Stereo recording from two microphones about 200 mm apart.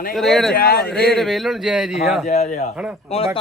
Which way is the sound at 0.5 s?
50° left (ahead or behind).